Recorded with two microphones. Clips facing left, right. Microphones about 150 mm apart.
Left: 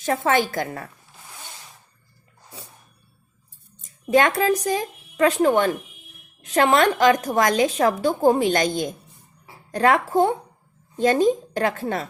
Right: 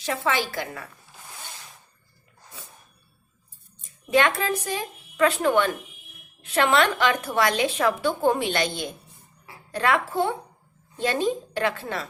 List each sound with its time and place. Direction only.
0.0 s a woman's voice: 50° left (ahead or behind)
3.8 s a sound: 40° left (ahead or behind)
4.4 s a woman's voice: 40° left (ahead or behind)